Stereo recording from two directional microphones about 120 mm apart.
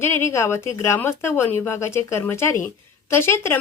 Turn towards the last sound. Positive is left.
turn(degrees=20)  # may be behind; listen again after turning